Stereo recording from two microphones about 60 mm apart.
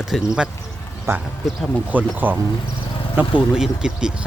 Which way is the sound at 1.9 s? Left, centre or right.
Right.